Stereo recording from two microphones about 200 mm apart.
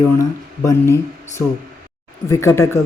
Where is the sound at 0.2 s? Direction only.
15° left (ahead or behind).